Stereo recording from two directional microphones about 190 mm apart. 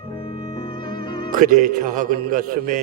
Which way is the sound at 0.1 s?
25° left (ahead or behind).